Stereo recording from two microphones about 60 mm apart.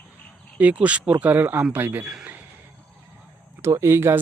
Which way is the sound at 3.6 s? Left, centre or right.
Right.